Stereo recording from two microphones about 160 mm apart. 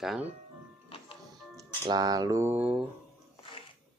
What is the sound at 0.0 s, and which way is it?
Speech, centre (ahead or behind).